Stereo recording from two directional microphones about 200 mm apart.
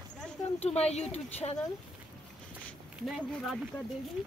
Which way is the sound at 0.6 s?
30° left (ahead or behind).